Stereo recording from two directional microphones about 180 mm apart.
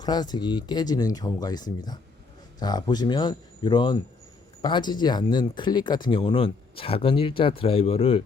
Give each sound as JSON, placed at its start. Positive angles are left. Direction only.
{"t": 0.0, "sound": "speech", "side_deg": 25}